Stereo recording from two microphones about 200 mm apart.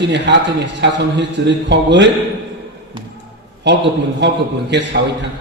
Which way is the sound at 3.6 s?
60° right (ahead or behind).